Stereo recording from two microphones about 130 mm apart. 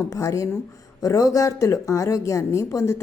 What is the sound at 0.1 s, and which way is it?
A woman's voice, 25° left (ahead or behind).